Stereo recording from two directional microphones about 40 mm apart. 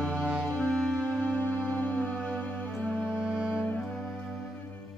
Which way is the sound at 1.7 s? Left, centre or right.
Left.